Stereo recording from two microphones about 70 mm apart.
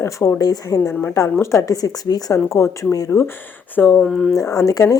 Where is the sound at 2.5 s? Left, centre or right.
Left.